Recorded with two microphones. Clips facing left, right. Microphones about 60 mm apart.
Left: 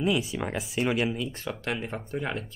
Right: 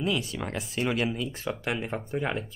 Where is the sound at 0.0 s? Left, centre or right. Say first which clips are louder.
Left 3 dB; centre.